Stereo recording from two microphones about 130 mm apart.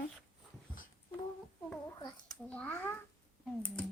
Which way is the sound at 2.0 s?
30° left (ahead or behind).